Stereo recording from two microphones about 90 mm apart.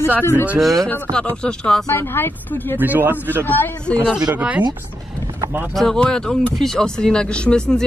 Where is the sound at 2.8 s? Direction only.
20° right (ahead or behind).